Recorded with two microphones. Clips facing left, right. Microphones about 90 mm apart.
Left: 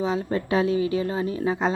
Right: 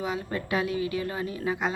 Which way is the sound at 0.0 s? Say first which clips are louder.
Left 6 dB; 30° left (ahead or behind).